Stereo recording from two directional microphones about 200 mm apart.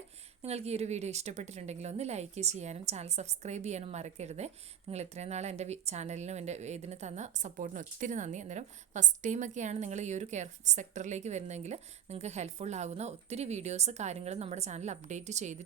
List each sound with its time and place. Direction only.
0.4 s a woman's voice: 30° right (ahead or behind)